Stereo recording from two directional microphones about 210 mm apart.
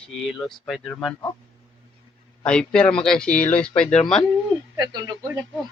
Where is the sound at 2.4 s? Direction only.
5° left (ahead or behind).